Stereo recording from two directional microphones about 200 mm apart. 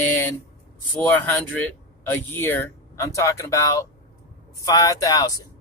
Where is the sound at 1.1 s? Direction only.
10° left (ahead or behind).